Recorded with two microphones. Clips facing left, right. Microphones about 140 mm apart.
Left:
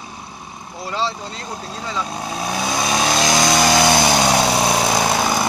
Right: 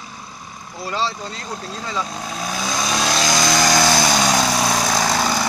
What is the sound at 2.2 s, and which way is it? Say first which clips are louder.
Vehicle: left 3 dB; 25° left (ahead or behind).